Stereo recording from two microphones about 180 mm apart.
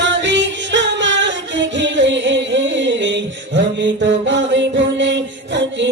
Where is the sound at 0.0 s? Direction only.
85° right.